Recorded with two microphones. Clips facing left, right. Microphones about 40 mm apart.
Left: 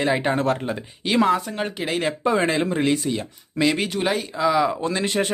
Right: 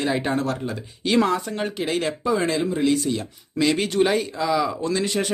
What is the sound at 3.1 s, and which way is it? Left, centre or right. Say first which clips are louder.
Speech: even; centre.